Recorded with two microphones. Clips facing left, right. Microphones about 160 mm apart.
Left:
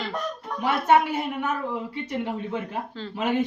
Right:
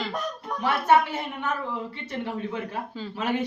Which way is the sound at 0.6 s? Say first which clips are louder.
Left 1 dB; 15° left (ahead or behind).